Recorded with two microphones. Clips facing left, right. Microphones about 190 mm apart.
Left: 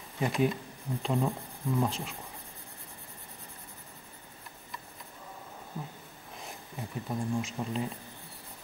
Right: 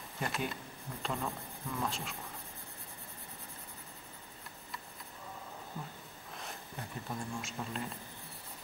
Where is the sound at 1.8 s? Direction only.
Centre (ahead or behind).